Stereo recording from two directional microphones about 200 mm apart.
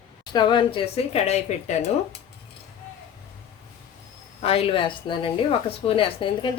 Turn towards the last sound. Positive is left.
turn(degrees=25)  # may be behind; listen again after turning